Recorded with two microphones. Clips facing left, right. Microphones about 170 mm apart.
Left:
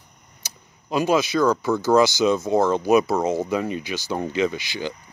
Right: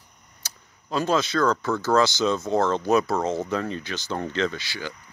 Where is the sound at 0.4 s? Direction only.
15° left (ahead or behind).